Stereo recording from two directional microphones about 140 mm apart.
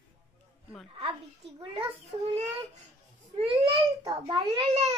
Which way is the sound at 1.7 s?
45° right (ahead or behind).